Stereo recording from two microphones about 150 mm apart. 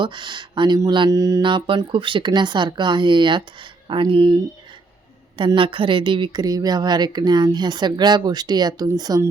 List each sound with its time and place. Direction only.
0.0 s speech: 30° right (ahead or behind)
5.4 s a woman's voice: 35° right (ahead or behind)